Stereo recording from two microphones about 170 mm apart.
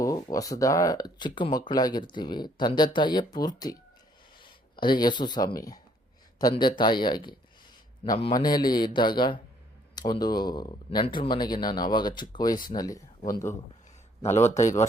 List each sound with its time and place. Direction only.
0.0 s speech: 20° left (ahead or behind)
14.3 s a man's voice: 40° left (ahead or behind)